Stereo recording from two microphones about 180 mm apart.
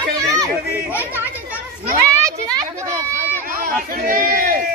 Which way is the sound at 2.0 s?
15° right (ahead or behind).